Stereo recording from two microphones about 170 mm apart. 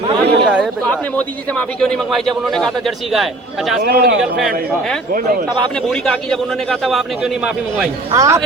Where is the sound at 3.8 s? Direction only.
65° right (ahead or behind).